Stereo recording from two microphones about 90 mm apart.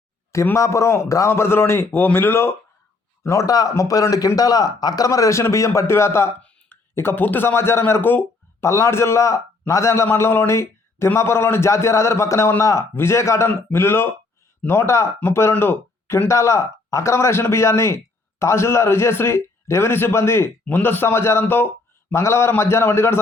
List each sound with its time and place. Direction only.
0.5 s a man's voice: 35° left (ahead or behind)
3.2 s a man's voice: 40° left (ahead or behind)